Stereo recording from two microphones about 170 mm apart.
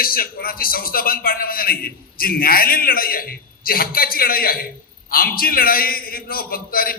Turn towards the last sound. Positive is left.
turn(degrees=60)  # may be behind; listen again after turning